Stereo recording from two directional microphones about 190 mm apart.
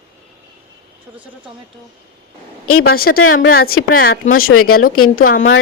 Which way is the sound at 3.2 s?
90° left.